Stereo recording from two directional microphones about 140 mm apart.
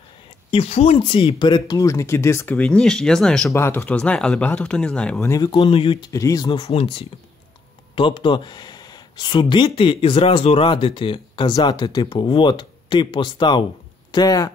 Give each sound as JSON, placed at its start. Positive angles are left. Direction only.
{"t": 0.5, "sound": "speech", "side_deg": 50}
{"t": 3.5, "sound": "speech", "side_deg": 15}
{"t": 5.3, "sound": "speech", "side_deg": 30}
{"t": 6.7, "sound": "speech", "side_deg": 40}